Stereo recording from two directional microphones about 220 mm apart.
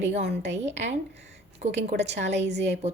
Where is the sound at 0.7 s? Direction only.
55° right (ahead or behind).